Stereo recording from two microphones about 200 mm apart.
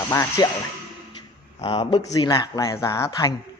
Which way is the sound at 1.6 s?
25° left (ahead or behind).